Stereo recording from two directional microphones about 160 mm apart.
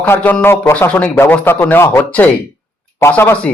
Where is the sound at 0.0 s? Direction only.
10° left (ahead or behind).